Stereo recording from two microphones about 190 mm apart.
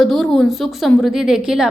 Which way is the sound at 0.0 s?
Centre (ahead or behind).